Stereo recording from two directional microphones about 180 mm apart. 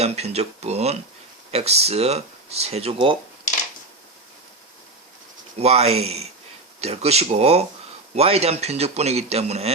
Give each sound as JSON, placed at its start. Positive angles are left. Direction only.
{"t": 0.0, "sound": "speech", "side_deg": -35}
{"t": 5.5, "sound": "speech", "side_deg": -35}